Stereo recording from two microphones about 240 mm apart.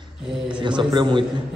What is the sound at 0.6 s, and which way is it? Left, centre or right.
Speech, centre.